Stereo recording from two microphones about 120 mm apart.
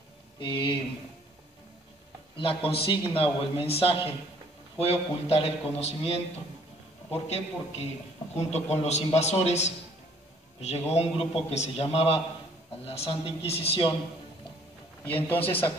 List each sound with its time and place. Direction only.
0.4 s a man's voice: 45° left (ahead or behind)
2.3 s a man's voice: 50° left (ahead or behind)
7.2 s a man's voice: 65° left (ahead or behind)
15.2 s a man's voice: 15° left (ahead or behind)